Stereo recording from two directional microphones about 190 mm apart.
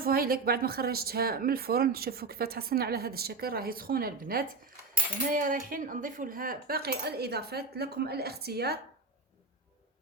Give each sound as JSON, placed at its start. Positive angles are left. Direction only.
{"t": 0.0, "sound": "speech", "side_deg": -50}